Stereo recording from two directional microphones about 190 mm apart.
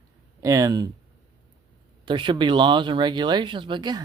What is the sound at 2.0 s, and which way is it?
Speech, 25° right (ahead or behind).